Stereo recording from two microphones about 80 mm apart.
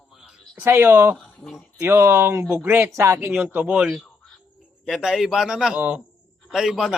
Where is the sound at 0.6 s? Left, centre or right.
Right.